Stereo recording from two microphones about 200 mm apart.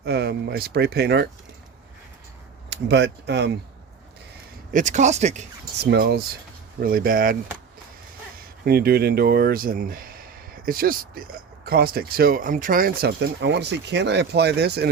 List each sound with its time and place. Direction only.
0.0 s speech: 55° right (ahead or behind)
2.6 s speech: 60° right (ahead or behind)
4.7 s speech: 40° right (ahead or behind)
5.8 s speech: 55° right (ahead or behind)
8.6 s speech: 50° right (ahead or behind)